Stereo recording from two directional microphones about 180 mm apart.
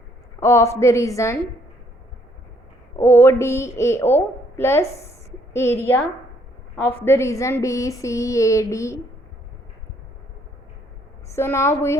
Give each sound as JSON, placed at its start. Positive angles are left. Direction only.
{"t": 0.3, "sound": "a woman's voice", "side_deg": 15}
{"t": 3.0, "sound": "a woman's voice", "side_deg": 15}
{"t": 6.8, "sound": "a woman's voice", "side_deg": 15}
{"t": 11.3, "sound": "a woman's voice", "side_deg": 15}